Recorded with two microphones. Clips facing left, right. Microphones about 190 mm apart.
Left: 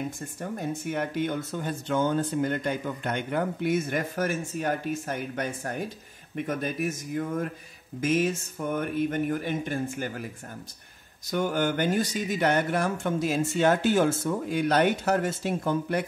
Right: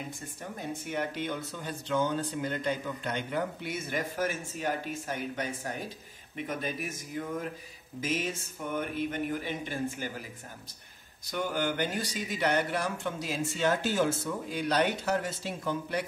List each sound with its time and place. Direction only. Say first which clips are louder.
0.4 s speech: left 6 dB; 50° left (ahead or behind)
11.2 s speech: left 5 dB; 50° left (ahead or behind)